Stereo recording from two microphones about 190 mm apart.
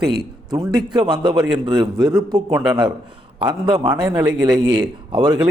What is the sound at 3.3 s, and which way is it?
A man's voice, 25° right (ahead or behind).